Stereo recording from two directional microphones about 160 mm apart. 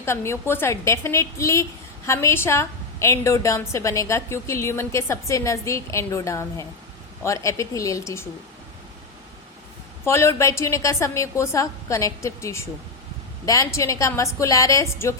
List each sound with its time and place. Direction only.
0.0 s a woman's voice: 15° left (ahead or behind)
10.1 s a woman's voice: 15° left (ahead or behind)